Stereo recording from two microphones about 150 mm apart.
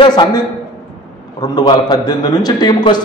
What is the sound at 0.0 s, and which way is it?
A man's voice, 30° left (ahead or behind).